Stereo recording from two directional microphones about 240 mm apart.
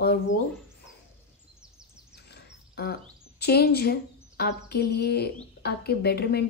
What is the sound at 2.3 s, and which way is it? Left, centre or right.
Speech, left.